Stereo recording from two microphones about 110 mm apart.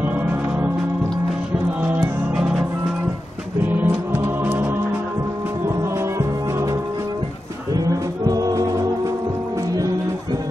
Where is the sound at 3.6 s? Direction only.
20° right (ahead or behind).